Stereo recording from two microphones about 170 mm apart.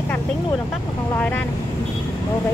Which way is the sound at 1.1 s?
10° left (ahead or behind).